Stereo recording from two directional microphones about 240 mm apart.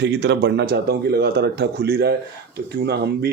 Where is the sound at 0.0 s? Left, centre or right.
Right.